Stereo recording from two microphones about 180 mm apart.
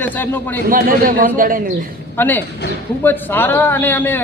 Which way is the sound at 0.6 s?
50° right (ahead or behind).